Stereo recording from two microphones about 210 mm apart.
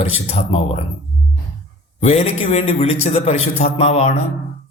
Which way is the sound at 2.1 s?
30° left (ahead or behind).